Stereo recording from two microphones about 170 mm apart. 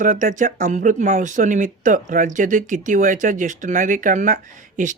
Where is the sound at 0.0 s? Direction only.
50° right (ahead or behind).